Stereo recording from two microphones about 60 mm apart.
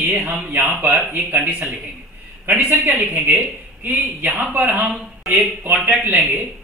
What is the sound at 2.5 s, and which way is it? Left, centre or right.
A woman's voice, right.